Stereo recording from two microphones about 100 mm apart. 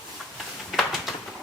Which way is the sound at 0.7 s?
Centre (ahead or behind).